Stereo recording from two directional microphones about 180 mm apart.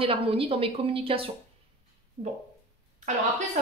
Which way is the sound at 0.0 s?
30° right (ahead or behind).